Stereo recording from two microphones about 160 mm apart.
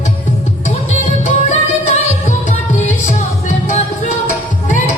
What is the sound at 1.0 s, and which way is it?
Music, 50° left (ahead or behind).